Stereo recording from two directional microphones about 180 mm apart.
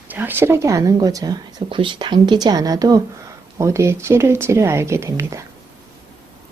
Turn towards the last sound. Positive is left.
turn(degrees=-15)  # may be behind; listen again after turning